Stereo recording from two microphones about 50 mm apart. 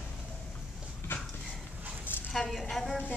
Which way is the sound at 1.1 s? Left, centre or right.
Left.